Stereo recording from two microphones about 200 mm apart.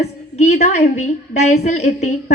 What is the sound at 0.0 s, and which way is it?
A woman's voice, 35° left (ahead or behind).